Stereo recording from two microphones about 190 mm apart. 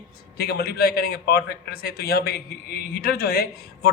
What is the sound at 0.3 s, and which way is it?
A man's voice, 55° left (ahead or behind).